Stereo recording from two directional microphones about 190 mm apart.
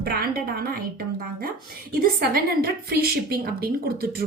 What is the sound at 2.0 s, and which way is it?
Speech, 50° right (ahead or behind).